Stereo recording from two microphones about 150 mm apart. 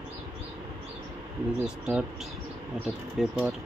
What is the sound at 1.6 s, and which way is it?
Speech, 5° right (ahead or behind).